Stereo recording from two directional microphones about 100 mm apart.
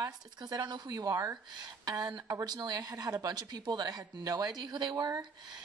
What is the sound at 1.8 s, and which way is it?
A woman's voice, 45° right (ahead or behind).